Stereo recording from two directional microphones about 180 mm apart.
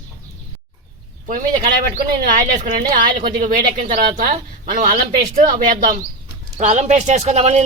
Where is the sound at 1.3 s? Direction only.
45° right (ahead or behind).